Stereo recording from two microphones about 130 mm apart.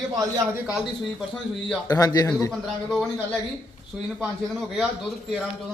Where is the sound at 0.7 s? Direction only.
5° right (ahead or behind).